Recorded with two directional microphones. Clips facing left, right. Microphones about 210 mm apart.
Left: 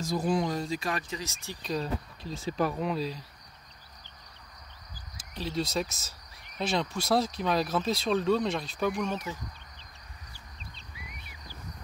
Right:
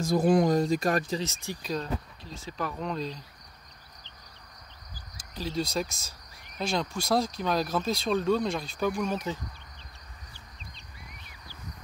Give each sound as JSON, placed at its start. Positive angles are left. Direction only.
{"t": 0.0, "sound": "speech", "side_deg": -50}
{"t": 1.2, "sound": "speech", "side_deg": -15}
{"t": 1.6, "sound": "speech", "side_deg": 0}
{"t": 5.3, "sound": "speech", "side_deg": 0}